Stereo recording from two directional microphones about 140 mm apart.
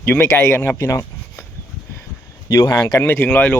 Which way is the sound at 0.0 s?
15° left (ahead or behind).